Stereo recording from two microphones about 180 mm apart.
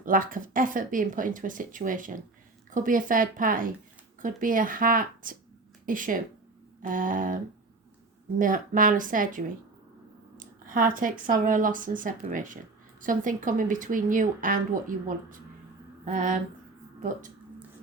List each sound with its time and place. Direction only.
0.0 s speech: 50° right (ahead or behind)
8.4 s speech: 50° right (ahead or behind)